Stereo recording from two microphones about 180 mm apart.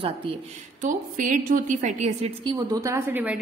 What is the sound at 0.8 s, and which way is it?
A woman's voice, 45° right (ahead or behind).